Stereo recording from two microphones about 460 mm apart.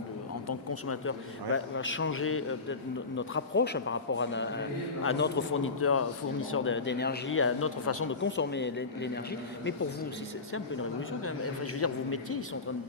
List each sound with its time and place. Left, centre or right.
0.4 s speech: left
11.3 s speech: left